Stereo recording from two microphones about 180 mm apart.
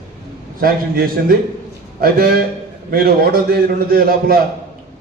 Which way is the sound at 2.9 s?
55° right (ahead or behind).